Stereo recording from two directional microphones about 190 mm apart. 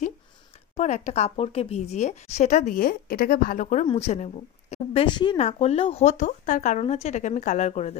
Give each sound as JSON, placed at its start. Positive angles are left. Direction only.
{"t": 0.7, "sound": "speech", "side_deg": 35}
{"t": 3.8, "sound": "speech", "side_deg": 30}